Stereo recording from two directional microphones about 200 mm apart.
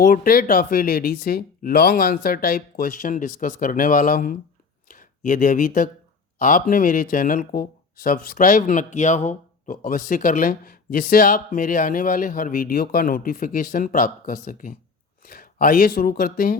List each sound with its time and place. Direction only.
0.0 s speech: 45° left (ahead or behind)